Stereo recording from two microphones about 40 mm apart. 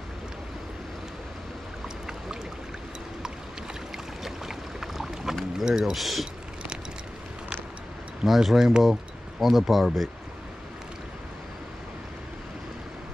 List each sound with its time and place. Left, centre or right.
4.2 s boat: centre
5.7 s speech: centre
5.9 s speech: centre
8.2 s speech: centre